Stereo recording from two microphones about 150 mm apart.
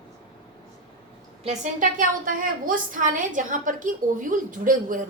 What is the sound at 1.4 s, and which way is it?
A woman's voice, 50° right (ahead or behind).